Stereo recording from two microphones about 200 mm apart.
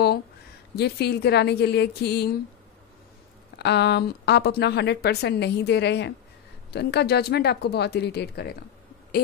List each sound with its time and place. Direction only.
0.7 s a woman's voice: 55° left (ahead or behind)
3.5 s a woman's voice: 55° left (ahead or behind)